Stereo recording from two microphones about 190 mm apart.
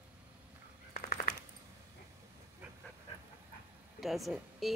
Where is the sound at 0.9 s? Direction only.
50° left (ahead or behind).